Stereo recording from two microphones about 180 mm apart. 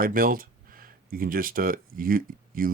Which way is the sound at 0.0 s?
50° right (ahead or behind).